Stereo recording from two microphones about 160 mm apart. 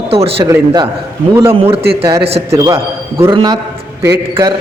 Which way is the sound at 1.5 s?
35° right (ahead or behind).